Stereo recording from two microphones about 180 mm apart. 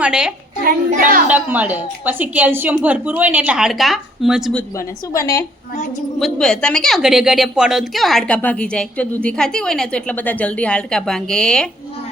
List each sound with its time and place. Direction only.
0.0 s a woman's voice: 5° right (ahead or behind)
0.6 s a child's voice: 50° right (ahead or behind)
1.3 s a woman's voice: 10° right (ahead or behind)
4.8 s a woman's voice: 20° left (ahead or behind)
6.1 s a woman's voice: centre (ahead or behind)